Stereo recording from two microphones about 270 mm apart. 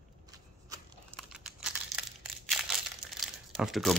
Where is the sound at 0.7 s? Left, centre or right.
Centre.